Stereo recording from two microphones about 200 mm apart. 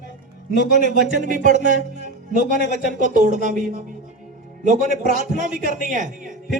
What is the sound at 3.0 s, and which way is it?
A man's voice, 40° right (ahead or behind).